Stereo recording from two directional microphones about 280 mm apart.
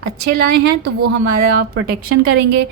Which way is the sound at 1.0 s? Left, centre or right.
Right.